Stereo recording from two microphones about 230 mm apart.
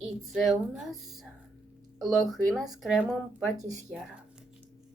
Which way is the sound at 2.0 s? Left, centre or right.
Centre.